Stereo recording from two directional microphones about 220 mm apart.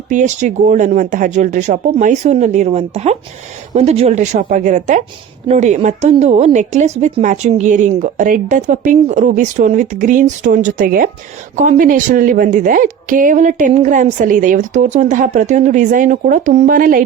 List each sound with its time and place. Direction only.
0.1 s a woman's voice: 35° right (ahead or behind)